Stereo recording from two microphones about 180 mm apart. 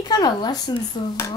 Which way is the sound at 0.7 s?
15° left (ahead or behind).